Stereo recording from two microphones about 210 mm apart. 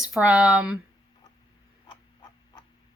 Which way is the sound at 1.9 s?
20° left (ahead or behind).